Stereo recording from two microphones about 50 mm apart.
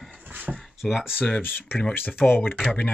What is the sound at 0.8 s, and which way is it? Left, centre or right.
Speech, centre.